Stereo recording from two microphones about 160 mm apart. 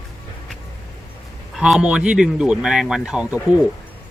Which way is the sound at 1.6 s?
5° right (ahead or behind).